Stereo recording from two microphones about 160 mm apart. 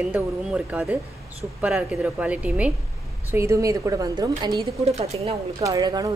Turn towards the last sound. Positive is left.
turn(degrees=-25)  # may be behind; listen again after turning